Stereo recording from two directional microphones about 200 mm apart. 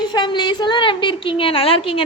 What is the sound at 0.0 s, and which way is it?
A woman's voice, 20° left (ahead or behind).